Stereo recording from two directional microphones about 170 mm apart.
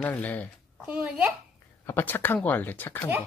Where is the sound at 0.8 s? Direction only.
5° right (ahead or behind).